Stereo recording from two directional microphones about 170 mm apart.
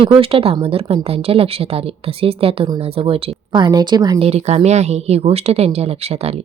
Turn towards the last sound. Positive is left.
turn(degrees=-35)  # may be behind; listen again after turning